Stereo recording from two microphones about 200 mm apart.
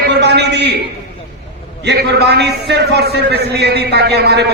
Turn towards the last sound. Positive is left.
turn(degrees=-55)  # may be behind; listen again after turning